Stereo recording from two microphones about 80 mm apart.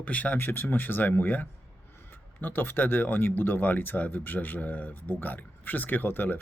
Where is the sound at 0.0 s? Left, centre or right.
Centre.